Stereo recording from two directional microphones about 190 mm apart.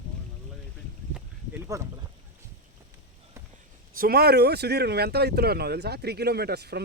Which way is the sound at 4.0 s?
55° right (ahead or behind).